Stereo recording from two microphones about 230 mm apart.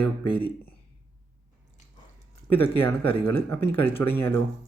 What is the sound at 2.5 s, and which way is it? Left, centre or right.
Speech, centre.